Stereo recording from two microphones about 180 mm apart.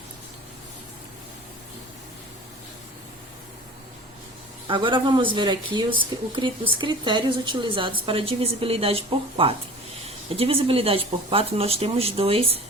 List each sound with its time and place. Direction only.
4.7 s speech: 25° right (ahead or behind)